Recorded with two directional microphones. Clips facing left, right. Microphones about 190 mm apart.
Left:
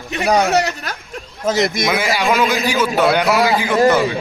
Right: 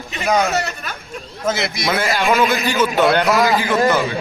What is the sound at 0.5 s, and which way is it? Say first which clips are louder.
Speech: left 5 dB; 70° left (ahead or behind).